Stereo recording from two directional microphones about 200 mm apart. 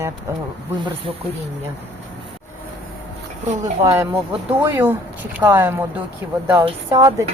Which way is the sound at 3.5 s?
35° right (ahead or behind).